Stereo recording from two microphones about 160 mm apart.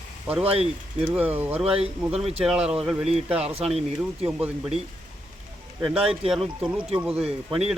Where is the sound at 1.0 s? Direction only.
10° right (ahead or behind).